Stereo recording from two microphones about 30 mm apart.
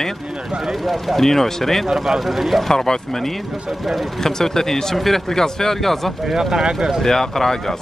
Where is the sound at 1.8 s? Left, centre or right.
Centre.